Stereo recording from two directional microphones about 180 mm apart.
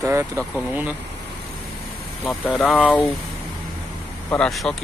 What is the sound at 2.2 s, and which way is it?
Speech, centre (ahead or behind).